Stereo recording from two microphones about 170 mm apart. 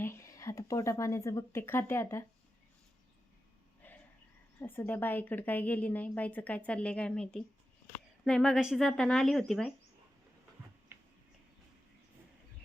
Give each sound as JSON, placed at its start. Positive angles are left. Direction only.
{"t": 0.0, "sound": "a woman's voice", "side_deg": 15}
{"t": 3.8, "sound": "a sound", "side_deg": 10}
{"t": 4.6, "sound": "a woman's voice", "side_deg": 10}
{"t": 10.9, "sound": "finger snapping", "side_deg": -15}